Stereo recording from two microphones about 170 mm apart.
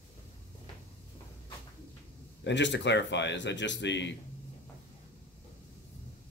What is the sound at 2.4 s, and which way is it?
A man's voice, 90° left.